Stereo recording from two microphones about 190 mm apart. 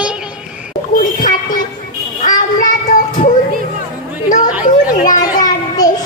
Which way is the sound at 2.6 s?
45° left (ahead or behind).